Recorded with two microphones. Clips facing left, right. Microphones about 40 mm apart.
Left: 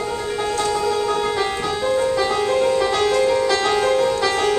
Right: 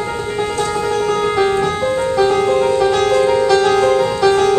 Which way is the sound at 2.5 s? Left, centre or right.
Centre.